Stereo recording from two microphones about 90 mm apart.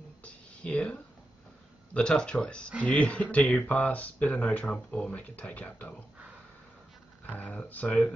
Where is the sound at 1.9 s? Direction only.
10° left (ahead or behind).